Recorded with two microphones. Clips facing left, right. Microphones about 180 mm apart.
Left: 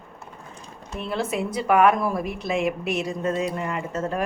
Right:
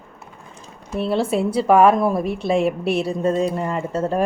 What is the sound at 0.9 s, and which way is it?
Speech, 35° right (ahead or behind).